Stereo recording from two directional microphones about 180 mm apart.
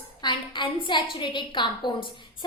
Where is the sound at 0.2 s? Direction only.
25° left (ahead or behind).